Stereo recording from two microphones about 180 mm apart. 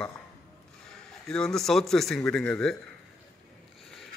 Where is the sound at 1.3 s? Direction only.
5° left (ahead or behind).